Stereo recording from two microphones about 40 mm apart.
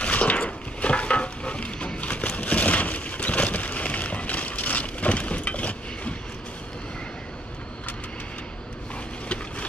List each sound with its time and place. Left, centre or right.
0.0 s stir: left